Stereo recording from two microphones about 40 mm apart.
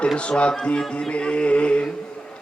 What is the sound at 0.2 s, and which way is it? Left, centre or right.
A man's voice, left.